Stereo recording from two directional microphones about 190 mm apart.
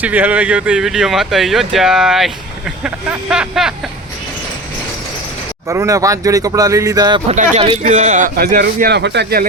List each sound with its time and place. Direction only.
0.0 s speech: 10° right (ahead or behind)
5.6 s speech: 15° right (ahead or behind)
7.3 s speech: 35° right (ahead or behind)
8.4 s speech: 55° right (ahead or behind)